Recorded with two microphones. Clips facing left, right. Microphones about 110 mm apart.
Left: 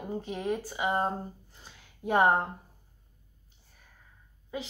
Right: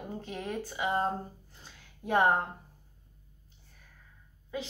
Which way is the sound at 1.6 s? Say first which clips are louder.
Left 5 dB; 20° left (ahead or behind).